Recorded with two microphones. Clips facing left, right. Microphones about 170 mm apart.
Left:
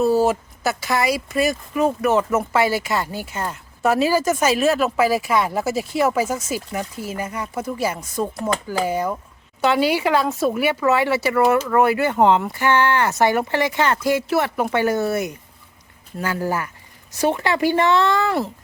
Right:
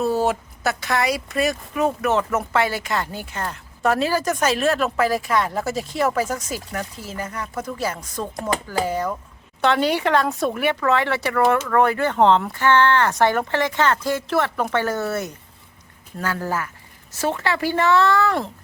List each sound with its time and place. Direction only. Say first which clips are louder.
0.0 s speech: left 3 dB; centre (ahead or behind); by 18.3 s 15° left (ahead or behind)